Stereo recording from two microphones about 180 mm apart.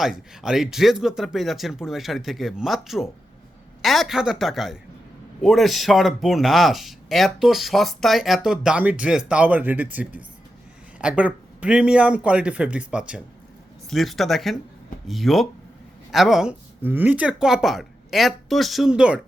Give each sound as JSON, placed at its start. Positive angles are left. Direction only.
{"t": 0.0, "sound": "a man's voice", "side_deg": 0}